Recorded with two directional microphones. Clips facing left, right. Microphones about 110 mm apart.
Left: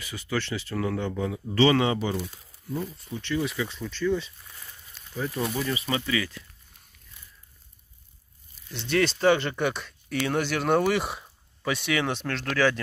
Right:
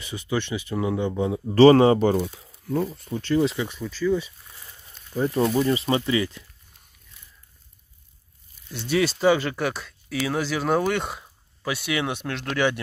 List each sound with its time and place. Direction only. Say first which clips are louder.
0.0 s speech: right 3 dB; 20° right (ahead or behind)
1.5 s speech: right 8 dB; 40° right (ahead or behind)
2.7 s speech: right 7 dB; 70° right (ahead or behind)
3.1 s speech: right 6 dB; 40° right (ahead or behind)
3.6 s speech: right 3 dB; 5° right (ahead or behind)
5.1 s speech: right 8 dB; 30° right (ahead or behind)
8.7 s speech: right 2 dB; 5° right (ahead or behind)